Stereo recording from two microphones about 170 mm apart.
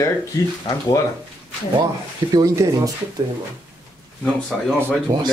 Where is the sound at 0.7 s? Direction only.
20° left (ahead or behind).